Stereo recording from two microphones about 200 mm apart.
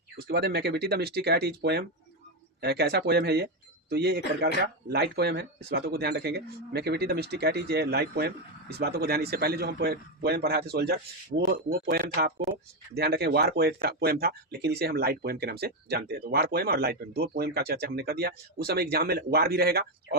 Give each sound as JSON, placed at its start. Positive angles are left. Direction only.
{"t": 0.3, "sound": "speech", "side_deg": -55}